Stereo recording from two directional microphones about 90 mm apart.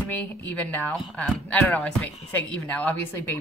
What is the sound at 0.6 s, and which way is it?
Speech, 20° left (ahead or behind).